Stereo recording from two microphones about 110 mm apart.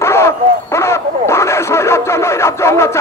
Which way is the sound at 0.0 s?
25° left (ahead or behind).